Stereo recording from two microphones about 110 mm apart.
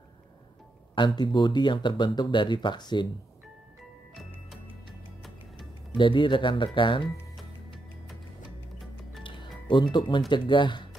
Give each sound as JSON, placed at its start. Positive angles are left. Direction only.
{"t": 0.9, "sound": "speech", "side_deg": 45}
{"t": 5.9, "sound": "speech", "side_deg": 45}
{"t": 9.2, "sound": "music", "side_deg": 45}
{"t": 10.3, "sound": "speech", "side_deg": 45}